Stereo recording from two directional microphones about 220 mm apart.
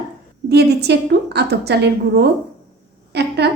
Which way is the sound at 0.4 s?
50° right (ahead or behind).